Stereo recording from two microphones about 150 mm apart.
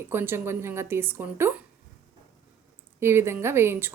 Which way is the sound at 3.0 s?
15° right (ahead or behind).